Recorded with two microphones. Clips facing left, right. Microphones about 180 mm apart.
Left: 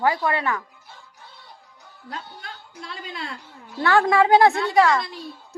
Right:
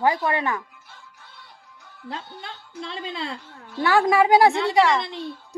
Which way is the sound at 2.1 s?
25° right (ahead or behind).